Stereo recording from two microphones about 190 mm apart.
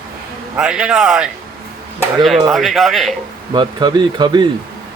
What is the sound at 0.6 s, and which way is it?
Speech, 5° right (ahead or behind).